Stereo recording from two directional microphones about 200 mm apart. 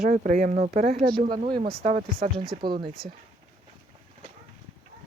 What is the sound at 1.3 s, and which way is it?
Speech, 25° right (ahead or behind).